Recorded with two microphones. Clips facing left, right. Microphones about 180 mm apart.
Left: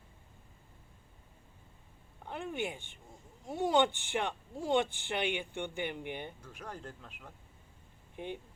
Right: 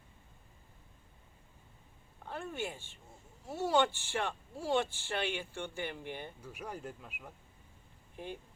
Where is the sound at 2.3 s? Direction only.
15° left (ahead or behind).